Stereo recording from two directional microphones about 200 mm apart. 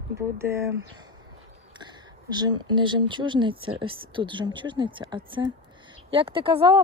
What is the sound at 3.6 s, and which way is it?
Speech, 90° right.